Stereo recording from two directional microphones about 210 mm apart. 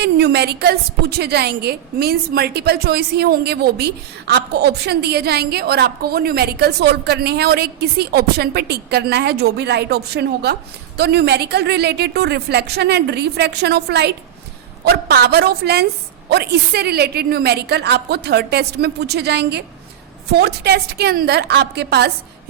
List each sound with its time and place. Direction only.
0.0 s a woman's voice: 50° right (ahead or behind)